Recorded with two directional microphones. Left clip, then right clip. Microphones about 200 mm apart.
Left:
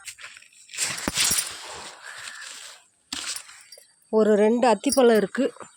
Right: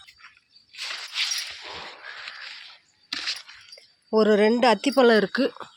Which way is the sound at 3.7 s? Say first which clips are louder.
Right 2 dB; 30° left (ahead or behind).